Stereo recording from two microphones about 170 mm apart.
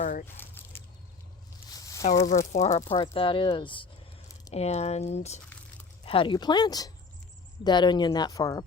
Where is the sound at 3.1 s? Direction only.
30° left (ahead or behind).